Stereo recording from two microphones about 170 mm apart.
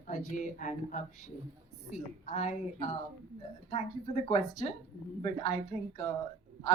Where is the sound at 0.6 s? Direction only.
45° left (ahead or behind).